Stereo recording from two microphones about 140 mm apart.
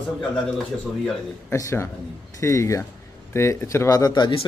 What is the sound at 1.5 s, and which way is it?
A man's voice, 20° left (ahead or behind).